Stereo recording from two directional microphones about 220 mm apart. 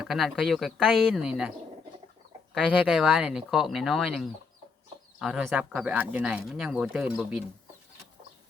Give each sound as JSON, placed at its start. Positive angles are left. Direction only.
{"t": 0.0, "sound": "speech", "side_deg": 0}
{"t": 2.8, "sound": "speech", "side_deg": 0}